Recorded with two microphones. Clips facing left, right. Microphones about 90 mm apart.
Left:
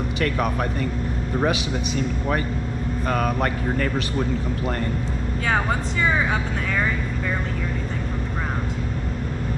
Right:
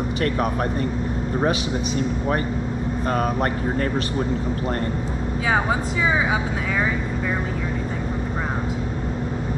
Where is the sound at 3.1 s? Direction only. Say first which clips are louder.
Even; 25° right (ahead or behind).